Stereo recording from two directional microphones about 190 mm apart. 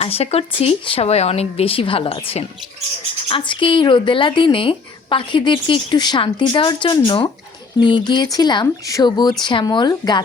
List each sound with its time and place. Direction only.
0.0 s a woman's voice: 30° left (ahead or behind)